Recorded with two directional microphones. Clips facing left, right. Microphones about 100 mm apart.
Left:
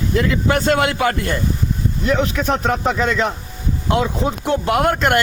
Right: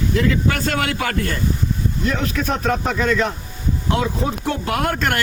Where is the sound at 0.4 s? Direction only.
25° left (ahead or behind).